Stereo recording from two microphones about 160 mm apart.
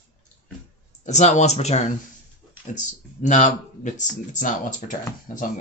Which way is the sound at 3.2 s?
50° left (ahead or behind).